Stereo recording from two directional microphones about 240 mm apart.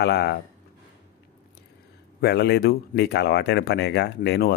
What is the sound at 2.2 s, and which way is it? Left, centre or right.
Speech, left.